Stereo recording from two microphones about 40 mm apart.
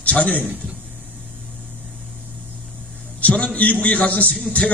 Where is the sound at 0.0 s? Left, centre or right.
Left.